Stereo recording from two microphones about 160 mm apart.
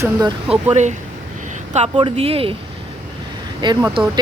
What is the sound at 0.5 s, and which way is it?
Speech, 45° right (ahead or behind).